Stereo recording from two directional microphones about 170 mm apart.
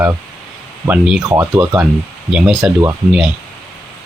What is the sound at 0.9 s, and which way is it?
Speech, 5° right (ahead or behind).